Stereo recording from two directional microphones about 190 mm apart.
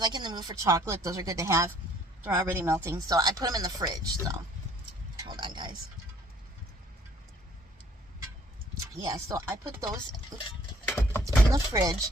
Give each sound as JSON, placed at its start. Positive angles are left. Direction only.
{"t": 0.0, "sound": "speech", "side_deg": -25}
{"t": 5.2, "sound": "a sound", "side_deg": -25}
{"t": 8.9, "sound": "speech", "side_deg": -20}